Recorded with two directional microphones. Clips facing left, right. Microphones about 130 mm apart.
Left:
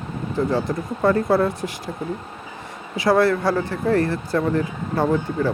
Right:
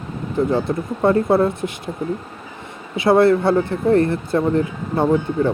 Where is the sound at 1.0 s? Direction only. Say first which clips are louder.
Right 2 dB; 25° right (ahead or behind).